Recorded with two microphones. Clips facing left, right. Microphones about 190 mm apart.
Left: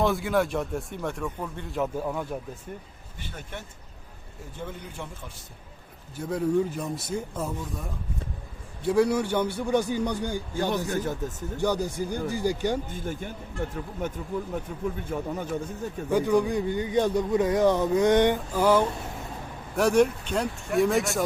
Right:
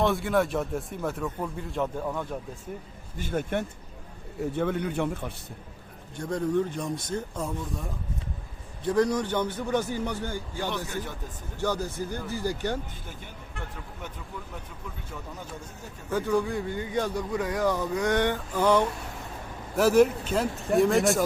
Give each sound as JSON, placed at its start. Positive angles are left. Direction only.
{"t": 0.0, "sound": "speech", "side_deg": 0}
{"t": 3.2, "sound": "speech", "side_deg": -50}
{"t": 4.5, "sound": "speech", "side_deg": -65}
{"t": 6.1, "sound": "a man's voice", "side_deg": 5}
{"t": 10.8, "sound": "speech", "side_deg": 45}
{"t": 11.5, "sound": "a man's voice", "side_deg": 15}
{"t": 13.6, "sound": "speech", "side_deg": 50}
{"t": 16.0, "sound": "a man's voice", "side_deg": 15}
{"t": 18.5, "sound": "a man's voice", "side_deg": 5}